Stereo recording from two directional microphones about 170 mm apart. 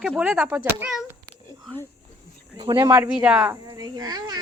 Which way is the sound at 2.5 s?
30° right (ahead or behind).